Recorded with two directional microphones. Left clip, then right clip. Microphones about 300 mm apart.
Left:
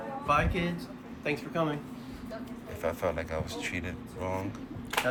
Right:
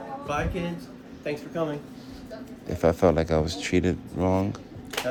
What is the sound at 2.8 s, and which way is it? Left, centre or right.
Speech, right.